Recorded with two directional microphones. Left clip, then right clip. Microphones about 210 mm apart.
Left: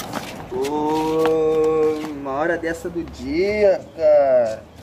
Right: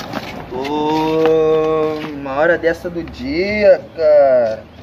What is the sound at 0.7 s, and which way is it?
Wild animals, 40° right (ahead or behind).